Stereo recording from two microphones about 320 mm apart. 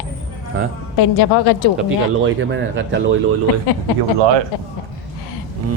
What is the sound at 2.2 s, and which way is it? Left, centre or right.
Speech, right.